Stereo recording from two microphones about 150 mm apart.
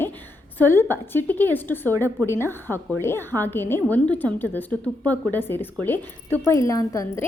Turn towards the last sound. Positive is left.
turn(degrees=20)  # may be behind; listen again after turning